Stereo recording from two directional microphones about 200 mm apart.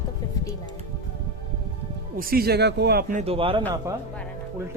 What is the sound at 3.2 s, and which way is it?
Speech, 30° right (ahead or behind).